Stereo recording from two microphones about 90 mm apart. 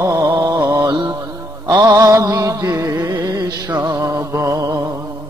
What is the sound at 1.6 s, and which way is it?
Music, 40° right (ahead or behind).